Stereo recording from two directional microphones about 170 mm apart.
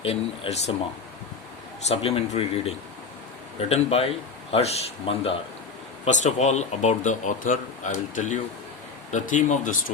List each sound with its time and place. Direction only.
0.0 s speech: 35° left (ahead or behind)
1.9 s speech: 35° left (ahead or behind)